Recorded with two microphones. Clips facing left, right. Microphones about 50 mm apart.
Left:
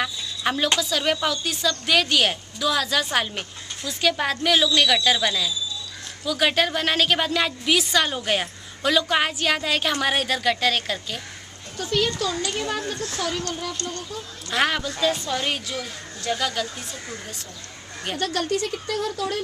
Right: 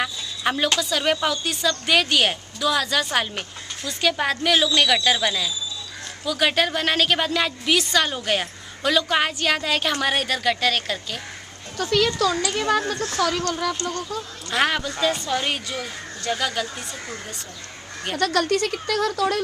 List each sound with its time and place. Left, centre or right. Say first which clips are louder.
0.0 s a sound: right 1 dB; centre
0.7 s a woman's voice: right 1 dB; centre
11.8 s speech: right 4 dB; right
14.5 s a woman's voice: right 1 dB; centre
18.2 s speech: right 4 dB; right